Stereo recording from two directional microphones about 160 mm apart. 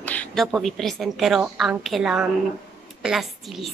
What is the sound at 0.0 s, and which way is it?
A woman's voice, 10° left (ahead or behind).